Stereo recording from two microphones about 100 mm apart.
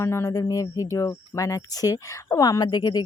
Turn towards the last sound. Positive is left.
turn(degrees=45)  # may be behind; listen again after turning